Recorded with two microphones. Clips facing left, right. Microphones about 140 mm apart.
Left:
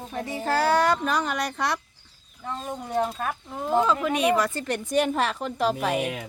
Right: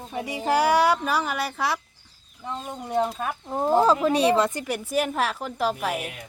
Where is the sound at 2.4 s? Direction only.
15° right (ahead or behind).